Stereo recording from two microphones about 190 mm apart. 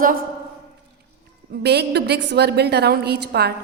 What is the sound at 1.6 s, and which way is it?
A woman's voice, 60° right (ahead or behind).